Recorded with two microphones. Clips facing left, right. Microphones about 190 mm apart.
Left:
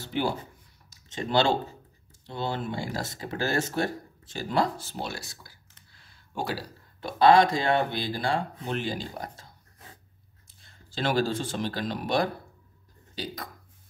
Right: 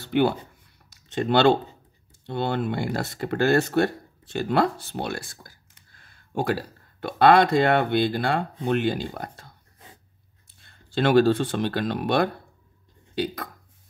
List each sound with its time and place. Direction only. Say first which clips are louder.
0.0 s speech: right 7 dB; 60° right (ahead or behind)
10.6 s speech: right 7 dB; 60° right (ahead or behind)
13.1 s a sound: right 8 dB; 60° right (ahead or behind)